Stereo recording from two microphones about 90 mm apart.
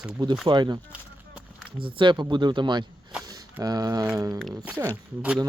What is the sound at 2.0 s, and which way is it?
Speech, 60° right (ahead or behind).